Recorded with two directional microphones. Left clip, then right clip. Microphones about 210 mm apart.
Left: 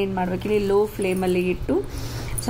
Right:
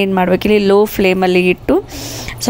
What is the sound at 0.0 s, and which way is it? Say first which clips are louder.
Speech: right 12 dB; 45° right (ahead or behind).